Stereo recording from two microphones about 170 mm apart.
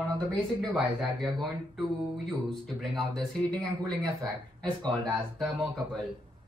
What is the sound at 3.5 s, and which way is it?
Speech, 25° right (ahead or behind).